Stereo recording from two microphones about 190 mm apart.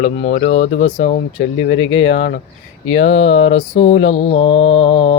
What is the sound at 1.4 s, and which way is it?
Speech, 90° left.